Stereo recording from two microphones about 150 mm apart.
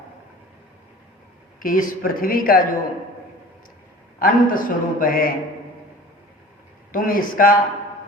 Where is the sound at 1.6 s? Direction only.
65° left (ahead or behind).